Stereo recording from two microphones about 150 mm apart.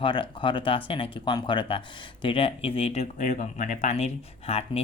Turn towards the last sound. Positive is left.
turn(degrees=45)  # may be behind; listen again after turning